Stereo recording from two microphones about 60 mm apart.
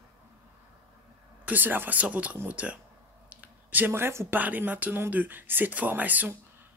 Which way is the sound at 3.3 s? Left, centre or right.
Right.